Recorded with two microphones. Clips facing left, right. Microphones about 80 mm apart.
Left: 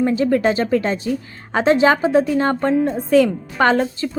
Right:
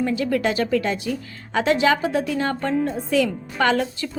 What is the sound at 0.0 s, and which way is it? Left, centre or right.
A woman's voice, left.